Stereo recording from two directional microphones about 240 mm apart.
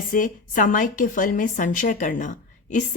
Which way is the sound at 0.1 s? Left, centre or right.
Left.